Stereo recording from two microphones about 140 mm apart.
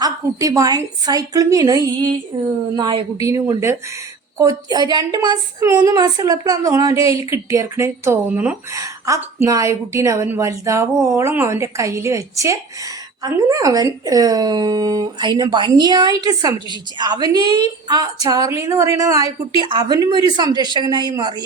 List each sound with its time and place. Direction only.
0.0 s a woman's voice: 25° right (ahead or behind)
8.7 s a woman's voice: 25° right (ahead or behind)